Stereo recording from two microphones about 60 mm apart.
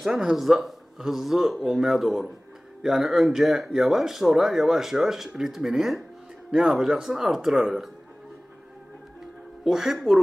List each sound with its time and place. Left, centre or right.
0.0 s speech: centre
9.7 s speech: centre